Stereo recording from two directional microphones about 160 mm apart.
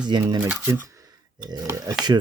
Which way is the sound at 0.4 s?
15° right (ahead or behind).